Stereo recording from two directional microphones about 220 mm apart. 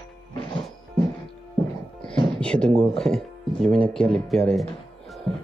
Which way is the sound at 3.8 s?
5° left (ahead or behind).